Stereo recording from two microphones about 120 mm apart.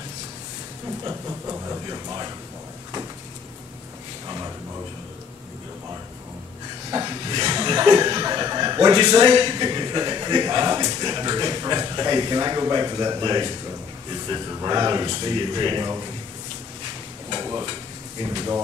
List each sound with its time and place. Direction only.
1.0 s speech: 30° right (ahead or behind)
6.9 s a man's voice: 35° right (ahead or behind)
17.3 s stir: 30° right (ahead or behind)